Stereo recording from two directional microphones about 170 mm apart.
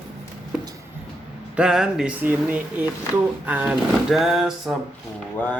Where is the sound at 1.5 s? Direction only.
5° right (ahead or behind).